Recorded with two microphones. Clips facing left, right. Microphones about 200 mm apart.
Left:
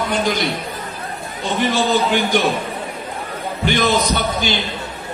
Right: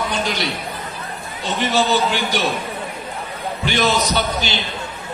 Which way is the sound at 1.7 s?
50° left (ahead or behind).